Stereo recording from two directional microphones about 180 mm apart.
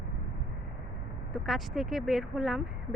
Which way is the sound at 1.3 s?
Centre (ahead or behind).